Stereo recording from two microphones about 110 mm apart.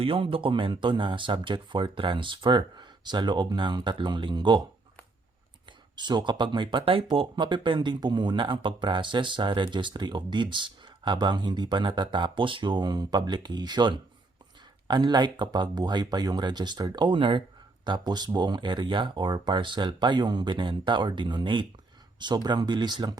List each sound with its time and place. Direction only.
0.0 s speech: 55° right (ahead or behind)
5.6 s speech: 45° right (ahead or behind)